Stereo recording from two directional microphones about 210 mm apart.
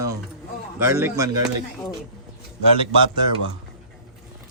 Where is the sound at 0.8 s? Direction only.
10° right (ahead or behind).